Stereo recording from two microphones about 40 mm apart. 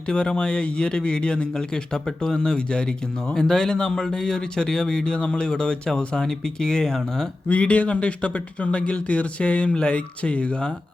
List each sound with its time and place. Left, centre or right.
0.1 s speech: left
7.4 s speech: left